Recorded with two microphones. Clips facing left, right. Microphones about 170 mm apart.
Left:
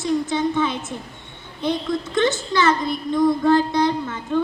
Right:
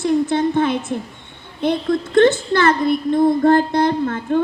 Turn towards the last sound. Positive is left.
turn(degrees=-55)  # may be behind; listen again after turning